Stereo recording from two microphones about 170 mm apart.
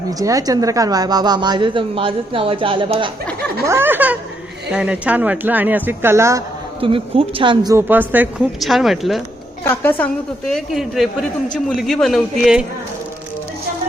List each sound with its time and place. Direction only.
0.1 s a woman's voice: 20° right (ahead or behind)
3.7 s speech: 15° right (ahead or behind)
6.7 s a woman's voice: 30° right (ahead or behind); by 9.2 s centre (ahead or behind)
9.6 s a woman's voice: 10° left (ahead or behind)